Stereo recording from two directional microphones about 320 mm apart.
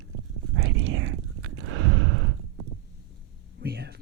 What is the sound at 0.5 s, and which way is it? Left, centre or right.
Whispering, right.